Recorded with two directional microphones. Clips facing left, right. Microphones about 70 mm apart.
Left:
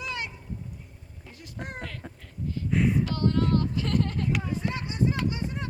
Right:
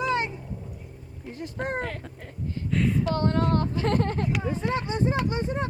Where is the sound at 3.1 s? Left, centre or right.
Right.